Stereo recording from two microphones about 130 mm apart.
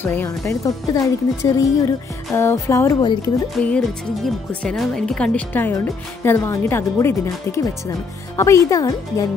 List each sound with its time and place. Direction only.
0.0 s speech: 15° left (ahead or behind)
0.3 s speech: 25° left (ahead or behind)
3.5 s speech: 5° left (ahead or behind); by 9.2 s 25° left (ahead or behind)